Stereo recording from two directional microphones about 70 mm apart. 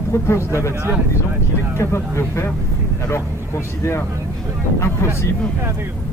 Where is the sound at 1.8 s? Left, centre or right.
Left.